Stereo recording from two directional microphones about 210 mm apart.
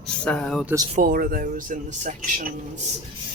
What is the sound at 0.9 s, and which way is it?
Speech, 45° right (ahead or behind).